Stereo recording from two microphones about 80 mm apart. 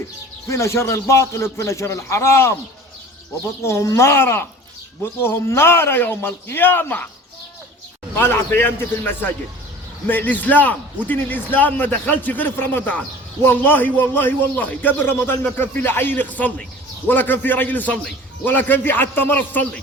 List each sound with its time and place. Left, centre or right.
0.4 s a man's voice: left
3.6 s a man's voice: left
8.1 s a man's voice: left